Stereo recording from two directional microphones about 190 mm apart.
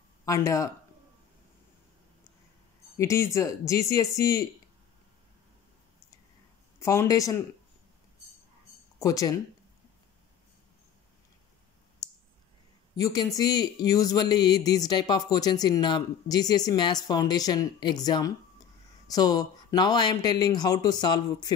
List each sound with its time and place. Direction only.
0.2 s speech: 15° left (ahead or behind)
3.0 s speech: 15° left (ahead or behind)
6.8 s speech: 15° left (ahead or behind)
9.0 s speech: 20° left (ahead or behind)
12.9 s speech: 20° left (ahead or behind)